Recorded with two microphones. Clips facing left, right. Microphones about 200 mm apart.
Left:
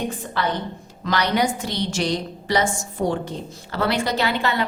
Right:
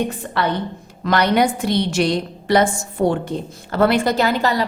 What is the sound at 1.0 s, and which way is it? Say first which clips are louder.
A woman's voice: right 5 dB; 55° right (ahead or behind).